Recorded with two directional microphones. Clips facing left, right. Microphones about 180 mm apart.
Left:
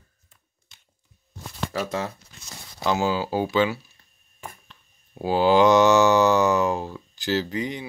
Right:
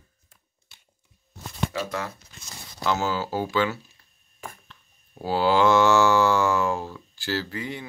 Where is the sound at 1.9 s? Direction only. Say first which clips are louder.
Left 3 dB; 25° left (ahead or behind).